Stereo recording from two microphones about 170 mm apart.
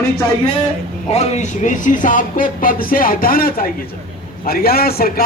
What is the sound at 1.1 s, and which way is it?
A man's voice, 40° left (ahead or behind).